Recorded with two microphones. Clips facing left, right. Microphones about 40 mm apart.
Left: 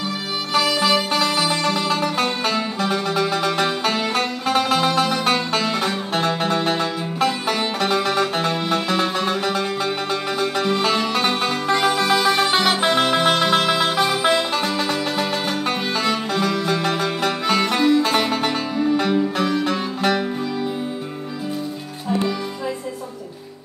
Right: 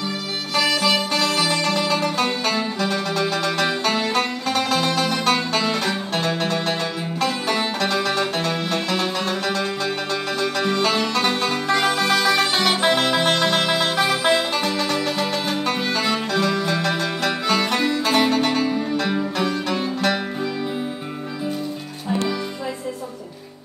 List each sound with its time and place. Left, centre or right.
0.7 s music: centre
10.8 s music: centre